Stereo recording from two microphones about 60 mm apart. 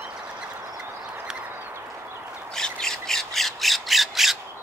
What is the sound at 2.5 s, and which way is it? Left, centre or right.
Squawk, centre.